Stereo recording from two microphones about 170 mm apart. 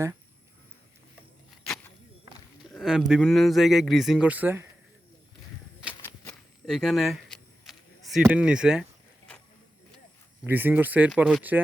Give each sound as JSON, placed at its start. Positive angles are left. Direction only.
{"t": 2.7, "sound": "speech", "side_deg": -5}
{"t": 6.2, "sound": "vehicle", "side_deg": 0}
{"t": 10.4, "sound": "speech", "side_deg": -10}